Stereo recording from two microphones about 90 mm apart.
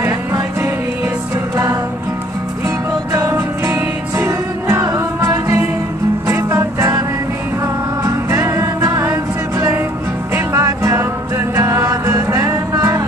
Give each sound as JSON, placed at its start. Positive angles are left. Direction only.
{"t": 0.0, "sound": "music", "side_deg": -25}
{"t": 3.1, "sound": "music", "side_deg": -30}